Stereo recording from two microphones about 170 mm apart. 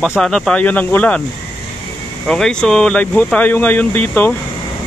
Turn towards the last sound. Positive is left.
turn(degrees=10)  # may be behind; listen again after turning